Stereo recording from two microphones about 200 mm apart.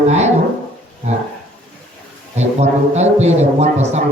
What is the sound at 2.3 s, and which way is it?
A man's voice, 35° right (ahead or behind).